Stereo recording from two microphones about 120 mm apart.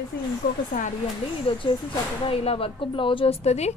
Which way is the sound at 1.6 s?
40° left (ahead or behind).